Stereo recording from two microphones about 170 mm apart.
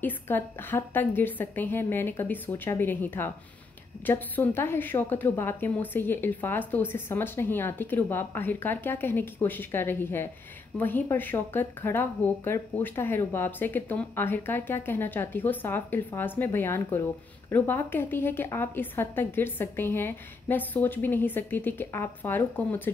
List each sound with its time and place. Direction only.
0.0 s a woman's voice: 10° left (ahead or behind)